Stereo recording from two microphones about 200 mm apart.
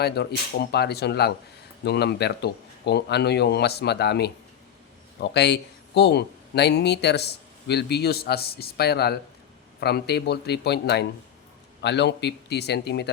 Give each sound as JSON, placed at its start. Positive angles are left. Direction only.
{"t": 0.0, "sound": "speech", "side_deg": 55}